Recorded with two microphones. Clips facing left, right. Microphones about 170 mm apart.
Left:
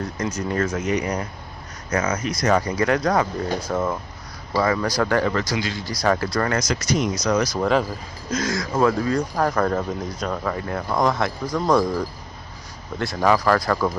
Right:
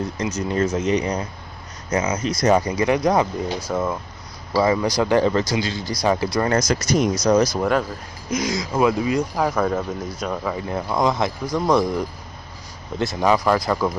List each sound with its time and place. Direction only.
0.2 s speech: 20° right (ahead or behind)
6.6 s speech: 50° right (ahead or behind)
7.2 s speech: 30° right (ahead or behind)
8.3 s speech: 15° right (ahead or behind)
13.0 s speech: 20° right (ahead or behind)